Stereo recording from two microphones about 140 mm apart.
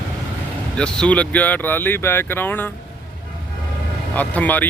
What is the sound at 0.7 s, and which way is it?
Speech, 5° left (ahead or behind).